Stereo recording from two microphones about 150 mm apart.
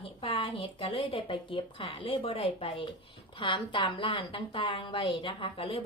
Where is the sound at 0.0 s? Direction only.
35° left (ahead or behind).